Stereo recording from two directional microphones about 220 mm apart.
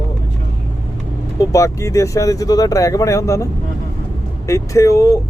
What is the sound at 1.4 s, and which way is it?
Speech, 15° left (ahead or behind).